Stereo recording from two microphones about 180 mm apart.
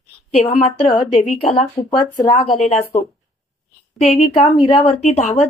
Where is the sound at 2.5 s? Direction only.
35° left (ahead or behind).